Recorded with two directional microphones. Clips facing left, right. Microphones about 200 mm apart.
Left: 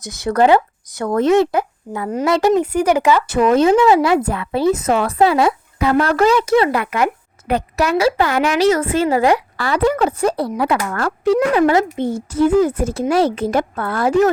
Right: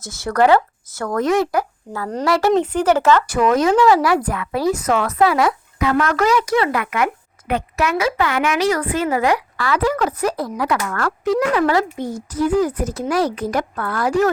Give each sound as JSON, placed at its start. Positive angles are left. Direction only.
{"t": 0.0, "sound": "a woman's voice", "side_deg": 20}
{"t": 2.5, "sound": "speech", "side_deg": 10}
{"t": 3.2, "sound": "a woman's voice", "side_deg": 25}